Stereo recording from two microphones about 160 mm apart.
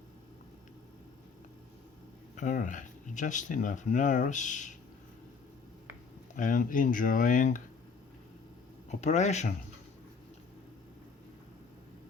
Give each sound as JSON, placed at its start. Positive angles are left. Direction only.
{"t": 2.3, "sound": "speech", "side_deg": 50}
{"t": 6.3, "sound": "speech", "side_deg": 55}
{"t": 8.9, "sound": "speech", "side_deg": 45}